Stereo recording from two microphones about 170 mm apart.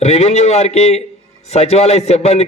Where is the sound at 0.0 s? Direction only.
40° left (ahead or behind).